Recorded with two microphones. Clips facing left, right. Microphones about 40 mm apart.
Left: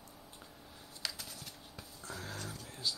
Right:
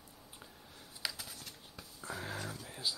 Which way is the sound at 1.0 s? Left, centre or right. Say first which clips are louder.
Right 1 dB; centre.